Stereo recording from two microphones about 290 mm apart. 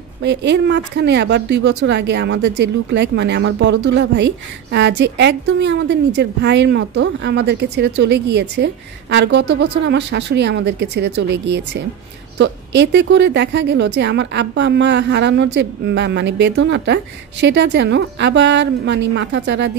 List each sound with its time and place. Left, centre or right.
0.2 s speech: right
12.4 s speech: right